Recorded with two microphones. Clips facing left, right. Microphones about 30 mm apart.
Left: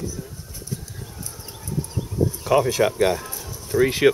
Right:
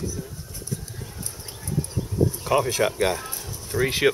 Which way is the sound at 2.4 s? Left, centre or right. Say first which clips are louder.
Left 5 dB; centre.